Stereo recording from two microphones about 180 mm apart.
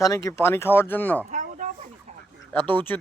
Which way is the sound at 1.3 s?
45° right (ahead or behind).